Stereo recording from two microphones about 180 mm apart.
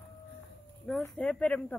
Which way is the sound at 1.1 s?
5° left (ahead or behind).